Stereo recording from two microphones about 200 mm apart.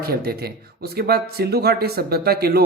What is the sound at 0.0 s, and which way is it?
Speech, 50° right (ahead or behind).